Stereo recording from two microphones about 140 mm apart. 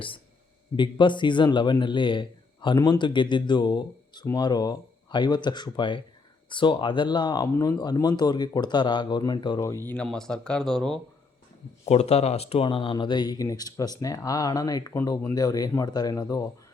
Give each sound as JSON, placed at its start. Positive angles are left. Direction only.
{"t": 0.8, "sound": "a man's voice", "side_deg": 35}
{"t": 9.8, "sound": "speech", "side_deg": 10}
{"t": 11.9, "sound": "a man's voice", "side_deg": 50}